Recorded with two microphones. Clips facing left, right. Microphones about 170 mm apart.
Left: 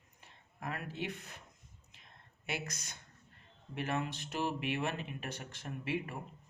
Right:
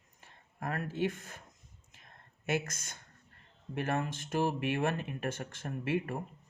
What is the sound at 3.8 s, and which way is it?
Speech, 50° right (ahead or behind).